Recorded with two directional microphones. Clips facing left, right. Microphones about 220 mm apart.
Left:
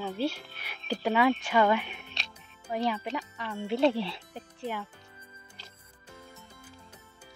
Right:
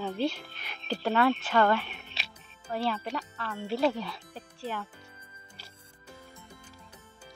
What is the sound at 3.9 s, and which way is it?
Speech, 25° left (ahead or behind).